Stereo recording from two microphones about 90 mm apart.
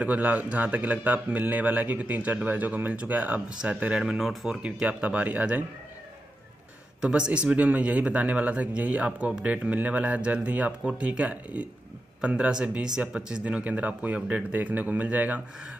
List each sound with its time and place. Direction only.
0.0 s speech: 15° right (ahead or behind)
7.0 s speech: 10° right (ahead or behind)